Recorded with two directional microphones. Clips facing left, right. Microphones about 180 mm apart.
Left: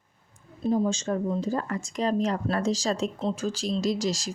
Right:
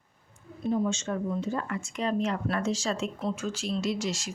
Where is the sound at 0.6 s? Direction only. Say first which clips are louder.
Left 3 dB; 35° left (ahead or behind).